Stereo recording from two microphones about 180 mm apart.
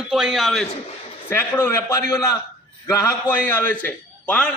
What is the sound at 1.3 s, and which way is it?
A man's voice, 15° left (ahead or behind).